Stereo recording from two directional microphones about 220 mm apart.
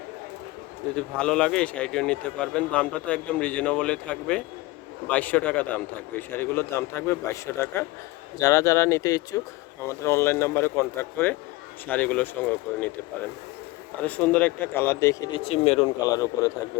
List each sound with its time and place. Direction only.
0.9 s speech: 5° left (ahead or behind)
14.0 s speech: 5° left (ahead or behind)
15.4 s speech: 30° left (ahead or behind)
16.0 s speech: 15° left (ahead or behind)